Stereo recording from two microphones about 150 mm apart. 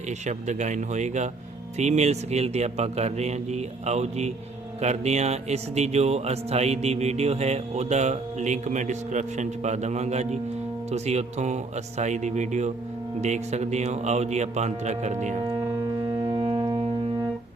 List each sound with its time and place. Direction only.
0.3 s speech: 50° right (ahead or behind)
16.0 s music: 25° right (ahead or behind)